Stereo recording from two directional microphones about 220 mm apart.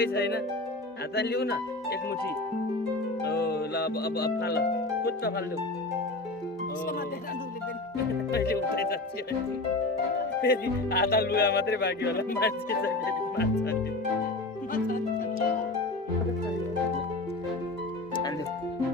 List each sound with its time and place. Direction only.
0.0 s speech: 45° left (ahead or behind)
3.2 s music: 45° left (ahead or behind)
8.3 s speech: 45° left (ahead or behind)
10.4 s speech: 45° left (ahead or behind)